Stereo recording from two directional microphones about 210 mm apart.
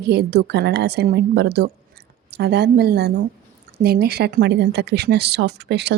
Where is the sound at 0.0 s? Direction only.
50° right (ahead or behind).